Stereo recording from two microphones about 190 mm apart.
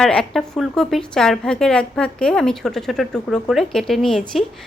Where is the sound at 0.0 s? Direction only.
5° left (ahead or behind).